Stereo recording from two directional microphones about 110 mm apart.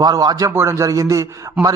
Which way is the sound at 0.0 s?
35° right (ahead or behind).